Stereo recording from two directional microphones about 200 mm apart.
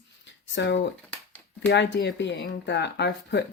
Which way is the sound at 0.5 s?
60° left (ahead or behind).